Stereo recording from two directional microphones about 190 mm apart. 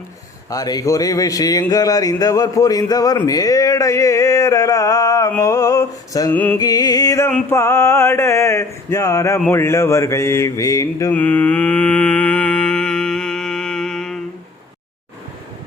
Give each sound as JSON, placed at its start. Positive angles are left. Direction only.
{"t": 0.5, "sound": "speech", "side_deg": 20}
{"t": 6.3, "sound": "music", "side_deg": 10}
{"t": 6.6, "sound": "speech", "side_deg": 20}
{"t": 7.5, "sound": "a sound", "side_deg": 15}